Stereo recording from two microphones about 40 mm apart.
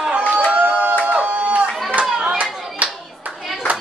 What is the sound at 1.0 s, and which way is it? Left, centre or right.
Music, right.